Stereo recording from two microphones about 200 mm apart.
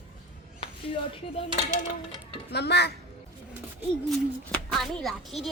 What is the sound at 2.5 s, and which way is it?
Speech, 55° left (ahead or behind).